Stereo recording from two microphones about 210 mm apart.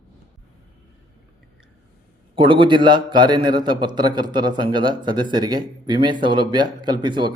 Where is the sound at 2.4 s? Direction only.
25° right (ahead or behind).